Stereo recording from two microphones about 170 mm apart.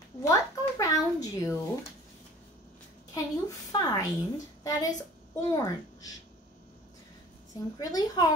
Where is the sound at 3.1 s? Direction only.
20° left (ahead or behind).